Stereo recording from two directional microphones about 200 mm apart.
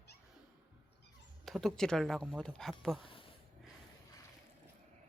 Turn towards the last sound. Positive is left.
turn(degrees=25)  # may be behind; listen again after turning